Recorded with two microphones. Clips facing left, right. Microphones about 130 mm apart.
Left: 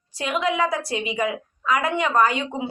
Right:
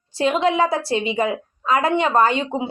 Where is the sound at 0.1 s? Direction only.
30° right (ahead or behind).